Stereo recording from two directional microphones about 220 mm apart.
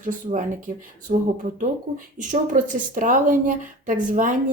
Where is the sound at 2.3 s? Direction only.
35° right (ahead or behind).